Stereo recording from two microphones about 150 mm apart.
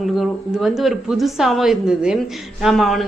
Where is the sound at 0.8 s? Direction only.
Centre (ahead or behind).